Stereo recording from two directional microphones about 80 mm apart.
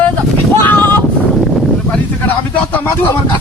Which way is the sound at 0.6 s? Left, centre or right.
Left.